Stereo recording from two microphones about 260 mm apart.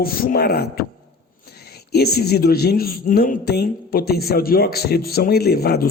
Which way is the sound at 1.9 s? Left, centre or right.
Left.